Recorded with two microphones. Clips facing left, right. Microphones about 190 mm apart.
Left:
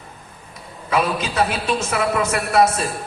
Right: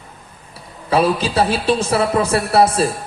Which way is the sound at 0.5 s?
30° right (ahead or behind).